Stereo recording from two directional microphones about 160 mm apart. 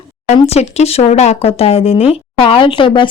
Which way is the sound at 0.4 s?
40° left (ahead or behind).